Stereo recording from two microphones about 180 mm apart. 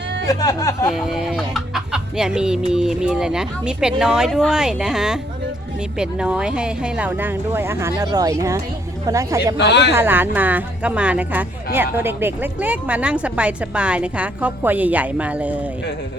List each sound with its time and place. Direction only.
0.3 s speech: 20° left (ahead or behind)
0.9 s chicken: centre (ahead or behind)
6.0 s speech: 5° right (ahead or behind)
9.6 s speech: 70° left (ahead or behind)
9.9 s speech: 10° right (ahead or behind)